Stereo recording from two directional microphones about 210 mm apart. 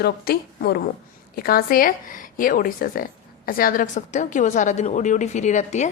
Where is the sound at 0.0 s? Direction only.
50° left (ahead or behind).